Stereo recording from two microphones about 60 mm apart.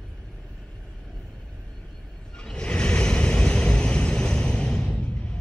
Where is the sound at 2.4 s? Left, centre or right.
Centre.